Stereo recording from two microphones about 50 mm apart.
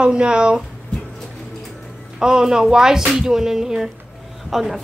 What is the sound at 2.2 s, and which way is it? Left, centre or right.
Speech, centre.